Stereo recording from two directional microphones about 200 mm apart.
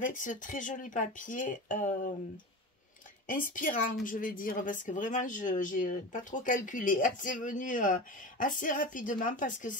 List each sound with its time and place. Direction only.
0.0 s a woman's voice: 40° left (ahead or behind)
3.3 s a woman's voice: 40° left (ahead or behind)